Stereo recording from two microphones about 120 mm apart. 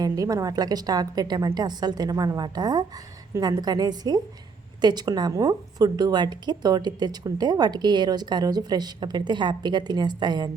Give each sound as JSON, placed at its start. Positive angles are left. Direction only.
{"t": 0.0, "sound": "a woman's voice", "side_deg": -30}